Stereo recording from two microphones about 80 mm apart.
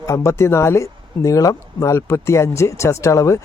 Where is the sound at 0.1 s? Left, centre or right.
Left.